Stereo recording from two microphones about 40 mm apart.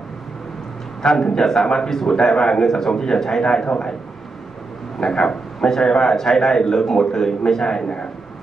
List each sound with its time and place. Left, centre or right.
1.0 s a man's voice: centre
5.0 s a man's voice: centre
7.8 s speech: left